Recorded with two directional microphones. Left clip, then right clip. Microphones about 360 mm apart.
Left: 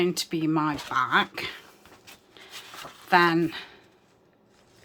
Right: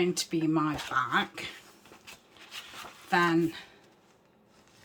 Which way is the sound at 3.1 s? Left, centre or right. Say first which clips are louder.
Left 5 dB; centre.